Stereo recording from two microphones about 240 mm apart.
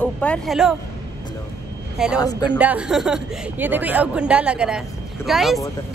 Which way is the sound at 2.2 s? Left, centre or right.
Centre.